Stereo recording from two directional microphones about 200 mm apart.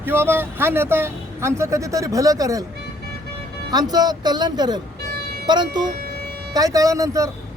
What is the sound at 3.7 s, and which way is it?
Speech, 20° right (ahead or behind).